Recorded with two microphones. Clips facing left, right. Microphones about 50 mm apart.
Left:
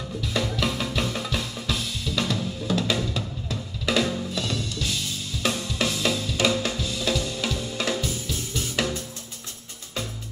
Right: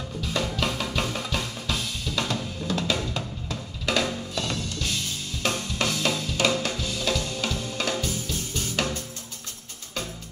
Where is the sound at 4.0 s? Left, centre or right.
Right.